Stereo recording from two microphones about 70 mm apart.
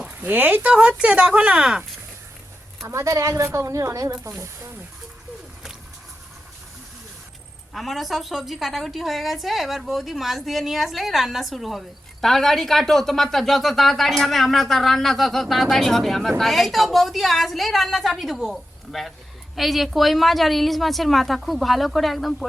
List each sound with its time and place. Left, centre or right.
0.2 s speech: right
2.8 s speech: right
7.7 s a woman's voice: centre